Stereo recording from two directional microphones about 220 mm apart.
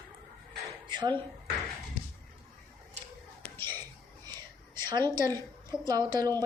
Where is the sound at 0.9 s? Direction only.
20° right (ahead or behind).